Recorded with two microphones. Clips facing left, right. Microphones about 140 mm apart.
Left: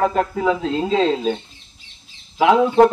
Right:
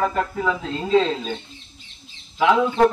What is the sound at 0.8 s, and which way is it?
Speech, 30° left (ahead or behind).